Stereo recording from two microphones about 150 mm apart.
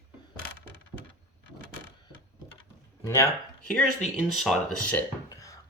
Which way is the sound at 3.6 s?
5° left (ahead or behind).